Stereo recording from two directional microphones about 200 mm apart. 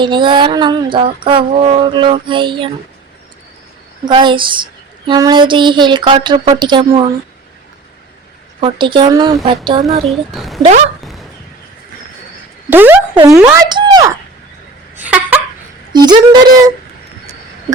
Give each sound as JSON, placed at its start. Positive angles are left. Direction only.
{"t": 0.0, "sound": "speech", "side_deg": -25}
{"t": 4.0, "sound": "speech", "side_deg": -25}
{"t": 8.6, "sound": "speech", "side_deg": -25}
{"t": 10.1, "sound": "speech", "side_deg": 0}
{"t": 10.6, "sound": "speech", "side_deg": -35}
{"t": 11.0, "sound": "a sound", "side_deg": 0}
{"t": 12.7, "sound": "speech", "side_deg": -10}
{"t": 14.9, "sound": "a sound", "side_deg": -5}
{"t": 15.9, "sound": "speech", "side_deg": -20}